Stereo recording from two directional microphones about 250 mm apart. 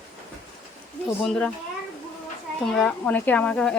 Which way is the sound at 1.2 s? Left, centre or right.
Centre.